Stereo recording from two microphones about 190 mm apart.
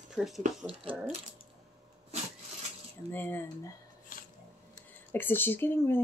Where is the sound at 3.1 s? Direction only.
10° left (ahead or behind).